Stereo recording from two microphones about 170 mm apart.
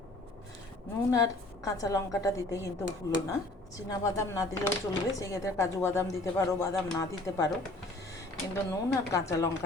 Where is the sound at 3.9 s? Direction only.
20° left (ahead or behind).